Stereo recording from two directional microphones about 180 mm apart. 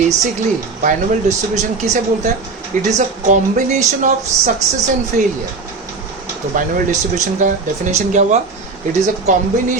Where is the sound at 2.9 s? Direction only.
45° right (ahead or behind).